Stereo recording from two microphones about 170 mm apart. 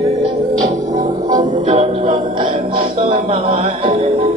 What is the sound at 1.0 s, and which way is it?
Music, 25° right (ahead or behind).